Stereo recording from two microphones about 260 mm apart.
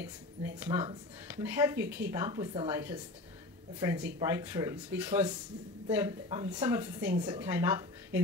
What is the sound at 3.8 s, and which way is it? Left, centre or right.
Speech, centre.